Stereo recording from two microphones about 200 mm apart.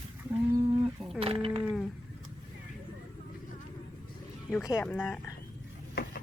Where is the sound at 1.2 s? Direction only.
30° right (ahead or behind).